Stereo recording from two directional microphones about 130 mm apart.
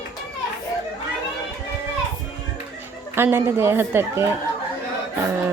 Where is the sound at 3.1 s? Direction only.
20° right (ahead or behind).